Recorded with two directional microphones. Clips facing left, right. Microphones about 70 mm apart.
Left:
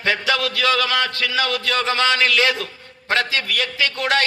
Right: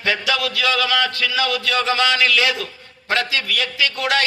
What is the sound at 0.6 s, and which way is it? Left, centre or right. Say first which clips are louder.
Speech: left 1 dB; left.